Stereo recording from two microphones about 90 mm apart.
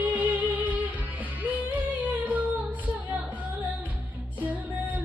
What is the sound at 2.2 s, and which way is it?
Music, 15° right (ahead or behind).